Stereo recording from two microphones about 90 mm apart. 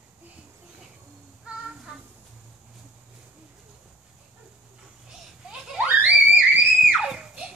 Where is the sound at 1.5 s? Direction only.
10° right (ahead or behind).